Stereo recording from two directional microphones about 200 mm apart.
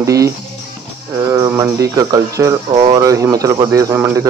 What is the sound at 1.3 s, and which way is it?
Speech, 15° right (ahead or behind).